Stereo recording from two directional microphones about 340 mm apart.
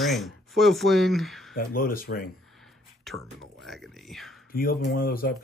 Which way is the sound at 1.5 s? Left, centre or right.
Left.